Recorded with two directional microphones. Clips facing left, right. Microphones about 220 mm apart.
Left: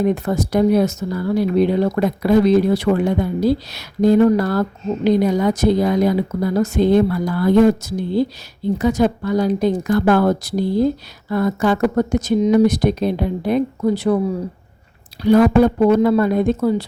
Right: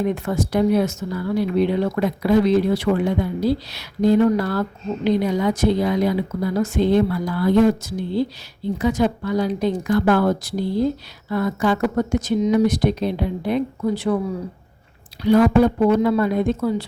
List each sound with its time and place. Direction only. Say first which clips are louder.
0.0 s speech: left 3 dB; 40° left (ahead or behind)
15.2 s speech: left 2 dB; 45° left (ahead or behind)